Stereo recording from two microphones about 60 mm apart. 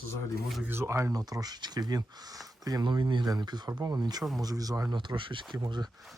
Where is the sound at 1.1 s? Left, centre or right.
Right.